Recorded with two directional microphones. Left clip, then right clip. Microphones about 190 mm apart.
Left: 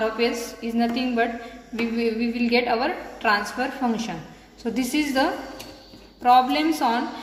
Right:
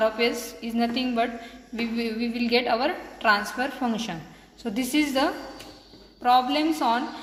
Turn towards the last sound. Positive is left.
turn(degrees=-10)  # may be behind; listen again after turning